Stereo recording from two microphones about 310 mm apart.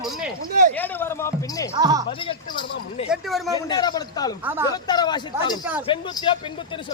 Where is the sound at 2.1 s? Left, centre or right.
Centre.